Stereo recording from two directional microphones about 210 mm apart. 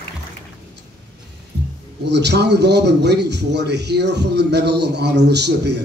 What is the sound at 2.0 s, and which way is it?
A man's voice, 55° right (ahead or behind).